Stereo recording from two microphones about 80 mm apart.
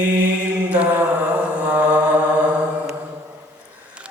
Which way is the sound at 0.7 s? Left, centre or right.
Centre.